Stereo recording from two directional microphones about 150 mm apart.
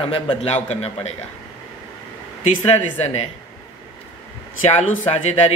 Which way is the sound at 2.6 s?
45° left (ahead or behind).